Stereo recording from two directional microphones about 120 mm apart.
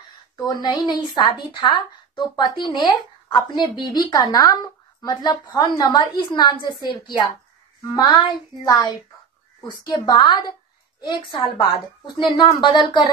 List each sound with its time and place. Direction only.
0.4 s a woman's voice: 35° left (ahead or behind)